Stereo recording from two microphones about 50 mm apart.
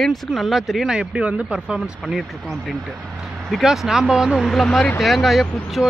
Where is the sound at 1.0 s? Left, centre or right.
Right.